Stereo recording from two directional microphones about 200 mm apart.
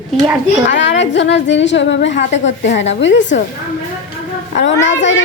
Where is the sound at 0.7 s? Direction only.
65° left (ahead or behind).